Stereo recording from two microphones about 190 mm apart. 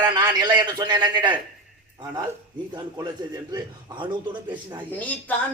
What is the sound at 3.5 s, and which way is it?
Speech, 25° right (ahead or behind).